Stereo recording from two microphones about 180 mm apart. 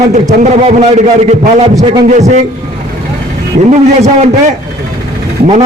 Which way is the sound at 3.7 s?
40° right (ahead or behind).